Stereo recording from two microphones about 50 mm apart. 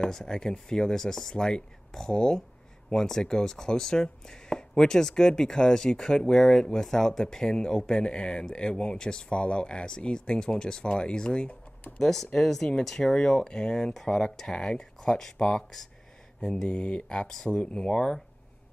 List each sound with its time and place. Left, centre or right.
0.0 s a man's voice: centre